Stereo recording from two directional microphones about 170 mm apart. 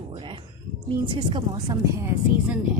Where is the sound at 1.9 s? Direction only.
10° right (ahead or behind).